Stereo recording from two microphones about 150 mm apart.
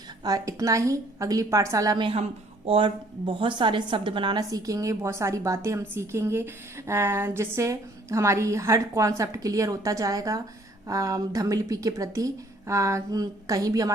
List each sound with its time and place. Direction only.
0.3 s a woman's voice: 20° right (ahead or behind)
2.0 s a woman's voice: 40° right (ahead or behind); by 13.9 s 25° right (ahead or behind)